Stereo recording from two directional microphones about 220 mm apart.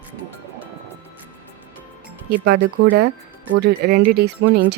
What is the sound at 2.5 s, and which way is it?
Speech, 50° right (ahead or behind).